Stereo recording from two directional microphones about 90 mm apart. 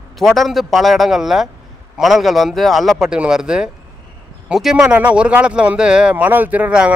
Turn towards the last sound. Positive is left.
turn(degrees=-15)  # may be behind; listen again after turning